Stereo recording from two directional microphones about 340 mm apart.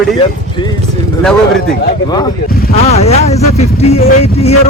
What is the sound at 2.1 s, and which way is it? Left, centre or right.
Speech, centre.